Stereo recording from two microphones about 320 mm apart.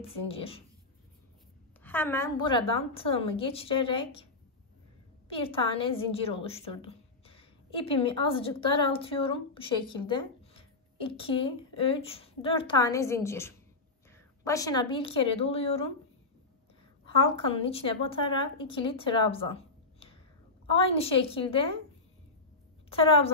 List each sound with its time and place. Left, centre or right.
0.1 s a woman's voice: centre
1.8 s a woman's voice: centre
5.3 s a woman's voice: centre
17.0 s a woman's voice: centre
22.8 s a woman's voice: centre